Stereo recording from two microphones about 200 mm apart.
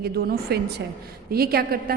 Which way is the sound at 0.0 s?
55° right (ahead or behind).